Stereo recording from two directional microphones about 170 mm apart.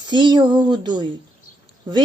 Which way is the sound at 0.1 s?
25° right (ahead or behind).